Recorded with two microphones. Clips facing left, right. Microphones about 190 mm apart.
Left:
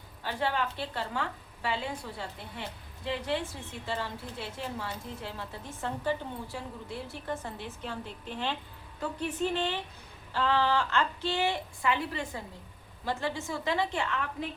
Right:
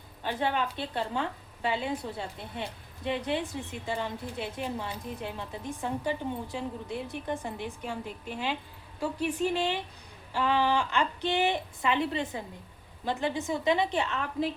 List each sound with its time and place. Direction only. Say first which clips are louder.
0.2 s a woman's voice: right 2 dB; 20° right (ahead or behind)